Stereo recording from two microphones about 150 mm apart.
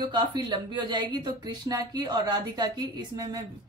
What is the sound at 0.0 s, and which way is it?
Speech, 30° right (ahead or behind).